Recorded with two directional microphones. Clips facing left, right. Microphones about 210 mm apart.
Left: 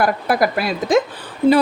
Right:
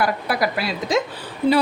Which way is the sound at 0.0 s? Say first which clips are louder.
Left 4 dB; 50° left (ahead or behind).